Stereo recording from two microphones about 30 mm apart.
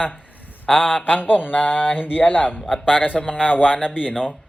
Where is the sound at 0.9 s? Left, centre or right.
Left.